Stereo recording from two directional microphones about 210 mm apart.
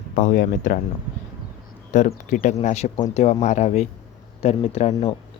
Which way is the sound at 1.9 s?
35° left (ahead or behind).